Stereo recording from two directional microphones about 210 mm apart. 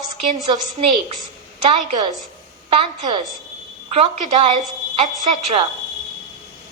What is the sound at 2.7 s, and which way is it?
A woman's voice, 25° right (ahead or behind).